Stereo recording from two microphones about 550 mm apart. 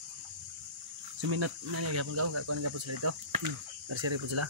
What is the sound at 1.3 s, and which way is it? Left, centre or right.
Cricket, right.